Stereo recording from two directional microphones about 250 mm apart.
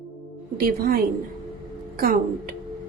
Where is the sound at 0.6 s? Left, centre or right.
Right.